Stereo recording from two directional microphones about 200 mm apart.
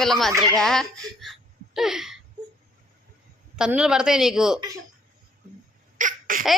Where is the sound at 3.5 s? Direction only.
5° right (ahead or behind).